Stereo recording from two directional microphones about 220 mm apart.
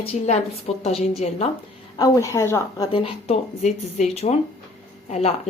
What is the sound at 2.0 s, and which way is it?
A woman's voice, 15° left (ahead or behind).